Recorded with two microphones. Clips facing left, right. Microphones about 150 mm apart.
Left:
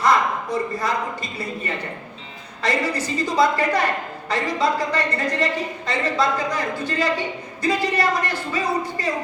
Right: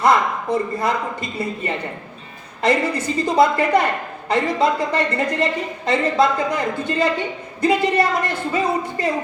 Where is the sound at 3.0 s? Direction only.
55° right (ahead or behind).